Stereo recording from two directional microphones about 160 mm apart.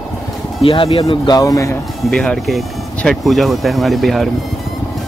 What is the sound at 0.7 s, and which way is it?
Speech, 35° left (ahead or behind).